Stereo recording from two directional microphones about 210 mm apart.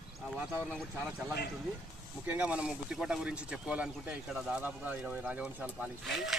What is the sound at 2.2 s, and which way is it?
Speech, 5° right (ahead or behind).